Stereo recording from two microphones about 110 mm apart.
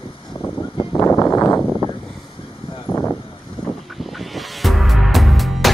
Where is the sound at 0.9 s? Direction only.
20° left (ahead or behind).